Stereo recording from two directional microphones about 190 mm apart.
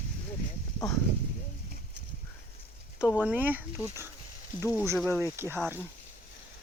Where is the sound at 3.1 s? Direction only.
10° right (ahead or behind).